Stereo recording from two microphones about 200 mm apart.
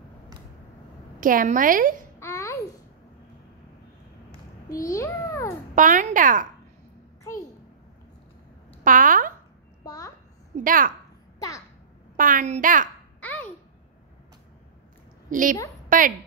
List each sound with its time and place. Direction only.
1.2 s a woman's voice: 45° right (ahead or behind)
2.1 s a sound: 15° left (ahead or behind)
4.6 s a child's voice: 15° left (ahead or behind)
5.8 s a child's voice: 40° right (ahead or behind)
8.8 s a sound: 40° right (ahead or behind)
9.8 s a sound: 15° left (ahead or behind)
10.5 s a child's voice: 45° right (ahead or behind)
11.3 s babbling: 15° left (ahead or behind)
12.2 s a child's voice: 40° right (ahead or behind)
13.2 s babbling: 10° left (ahead or behind)
15.2 s a woman's voice: 40° right (ahead or behind)